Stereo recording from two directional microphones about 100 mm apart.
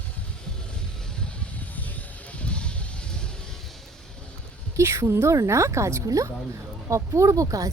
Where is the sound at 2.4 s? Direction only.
10° left (ahead or behind).